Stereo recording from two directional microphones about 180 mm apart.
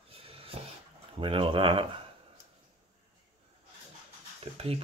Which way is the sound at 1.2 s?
30° right (ahead or behind).